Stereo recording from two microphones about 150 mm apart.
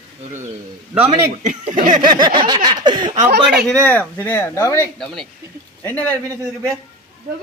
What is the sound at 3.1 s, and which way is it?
Speech, 75° right (ahead or behind).